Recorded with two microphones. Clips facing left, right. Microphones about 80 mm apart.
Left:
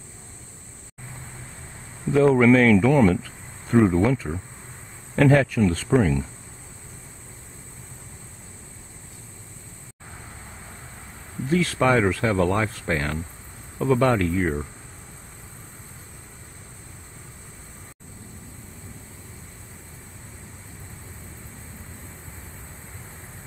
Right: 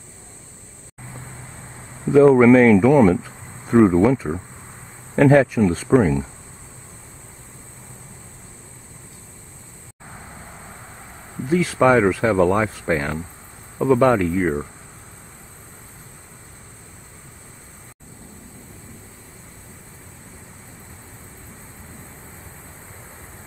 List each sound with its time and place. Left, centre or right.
2.3 s speech: centre
2.8 s a sound: centre
3.8 s speech: centre
11.4 s speech: centre